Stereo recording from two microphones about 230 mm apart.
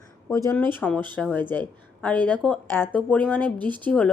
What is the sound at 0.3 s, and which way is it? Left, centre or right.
Speech, centre.